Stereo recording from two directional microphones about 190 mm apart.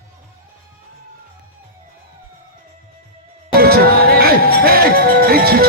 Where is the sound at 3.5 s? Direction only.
55° right (ahead or behind).